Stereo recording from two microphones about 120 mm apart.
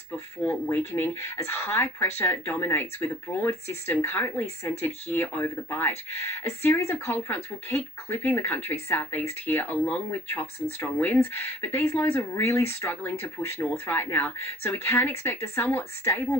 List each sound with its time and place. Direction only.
0.7 s speech: 20° left (ahead or behind)